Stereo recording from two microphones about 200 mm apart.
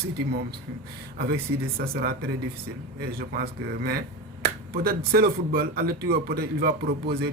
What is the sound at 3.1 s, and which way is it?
Speech, 50° right (ahead or behind).